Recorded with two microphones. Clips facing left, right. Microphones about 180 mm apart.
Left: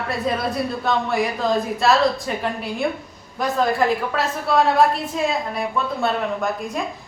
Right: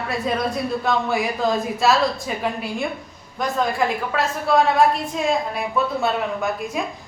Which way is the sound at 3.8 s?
Centre (ahead or behind).